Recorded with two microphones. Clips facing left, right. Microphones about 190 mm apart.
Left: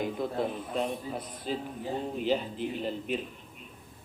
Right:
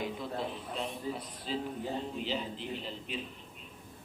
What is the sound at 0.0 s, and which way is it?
A man's voice, 50° left (ahead or behind).